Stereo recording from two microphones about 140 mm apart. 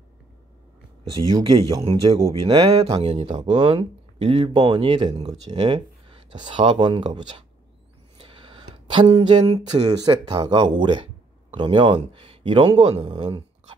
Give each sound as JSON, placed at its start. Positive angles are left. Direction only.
{"t": 1.1, "sound": "speech", "side_deg": -35}
{"t": 12.8, "sound": "speech", "side_deg": -50}
{"t": 13.2, "sound": "a sound", "side_deg": -35}